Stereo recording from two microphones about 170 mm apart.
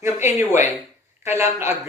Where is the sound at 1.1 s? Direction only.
15° right (ahead or behind).